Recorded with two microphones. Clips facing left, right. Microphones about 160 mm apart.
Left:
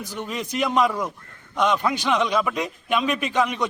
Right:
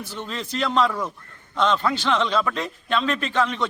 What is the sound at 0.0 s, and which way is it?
A man's voice, 15° left (ahead or behind).